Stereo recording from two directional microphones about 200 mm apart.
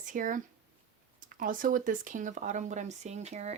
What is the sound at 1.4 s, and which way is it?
Speech, 40° right (ahead or behind).